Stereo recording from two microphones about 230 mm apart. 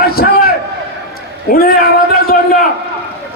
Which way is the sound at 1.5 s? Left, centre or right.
Left.